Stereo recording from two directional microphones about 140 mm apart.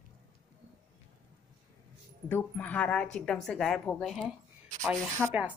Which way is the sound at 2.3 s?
10° left (ahead or behind).